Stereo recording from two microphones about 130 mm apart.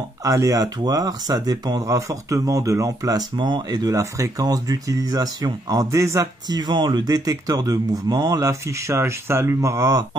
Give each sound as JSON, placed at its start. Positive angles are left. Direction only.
{"t": 0.2, "sound": "speech", "side_deg": -25}
{"t": 6.6, "sound": "speech", "side_deg": -35}